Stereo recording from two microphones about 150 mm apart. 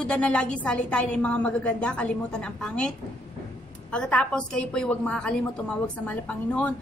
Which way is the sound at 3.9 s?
5° left (ahead or behind).